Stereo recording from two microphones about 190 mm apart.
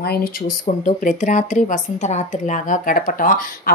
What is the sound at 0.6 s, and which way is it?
Speech, 40° left (ahead or behind).